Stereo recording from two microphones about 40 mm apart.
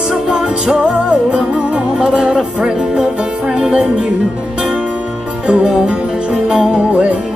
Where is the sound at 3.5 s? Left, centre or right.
Right.